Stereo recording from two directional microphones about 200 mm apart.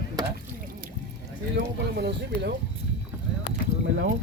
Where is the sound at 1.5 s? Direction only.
55° right (ahead or behind).